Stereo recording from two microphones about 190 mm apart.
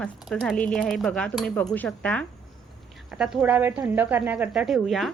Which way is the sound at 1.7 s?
10° left (ahead or behind).